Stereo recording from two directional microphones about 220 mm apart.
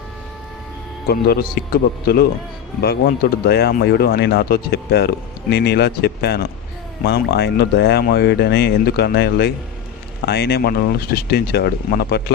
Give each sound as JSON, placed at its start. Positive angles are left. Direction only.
{"t": 1.0, "sound": "speech", "side_deg": 45}